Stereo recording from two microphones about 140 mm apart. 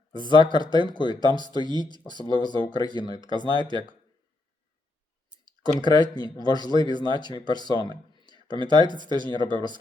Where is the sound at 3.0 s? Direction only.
35° right (ahead or behind).